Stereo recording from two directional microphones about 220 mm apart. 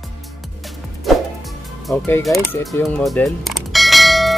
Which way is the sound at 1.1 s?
Centre (ahead or behind).